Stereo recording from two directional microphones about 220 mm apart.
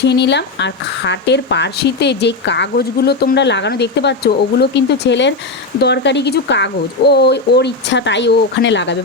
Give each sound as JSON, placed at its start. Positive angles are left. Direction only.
{"t": 0.0, "sound": "speech", "side_deg": 50}